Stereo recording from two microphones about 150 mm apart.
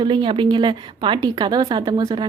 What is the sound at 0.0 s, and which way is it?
A woman's voice, 35° right (ahead or behind).